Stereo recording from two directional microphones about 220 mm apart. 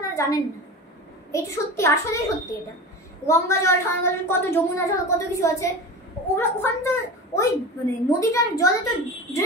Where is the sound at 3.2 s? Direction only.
15° left (ahead or behind).